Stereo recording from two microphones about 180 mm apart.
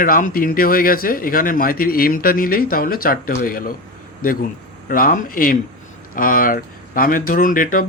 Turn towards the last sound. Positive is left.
turn(degrees=50)  # may be behind; listen again after turning